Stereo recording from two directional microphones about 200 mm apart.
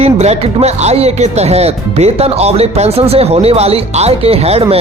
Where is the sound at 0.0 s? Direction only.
30° right (ahead or behind).